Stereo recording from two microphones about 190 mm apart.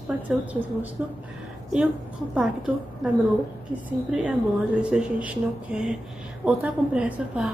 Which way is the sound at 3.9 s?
5° right (ahead or behind).